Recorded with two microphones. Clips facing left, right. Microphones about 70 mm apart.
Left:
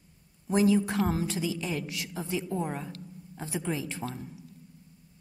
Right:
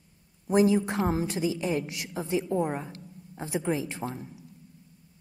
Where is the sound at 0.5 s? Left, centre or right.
Right.